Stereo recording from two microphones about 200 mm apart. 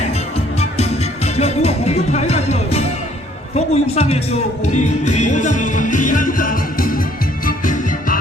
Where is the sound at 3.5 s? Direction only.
30° left (ahead or behind).